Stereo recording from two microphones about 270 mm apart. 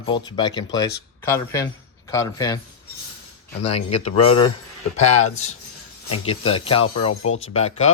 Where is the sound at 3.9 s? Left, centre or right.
Left.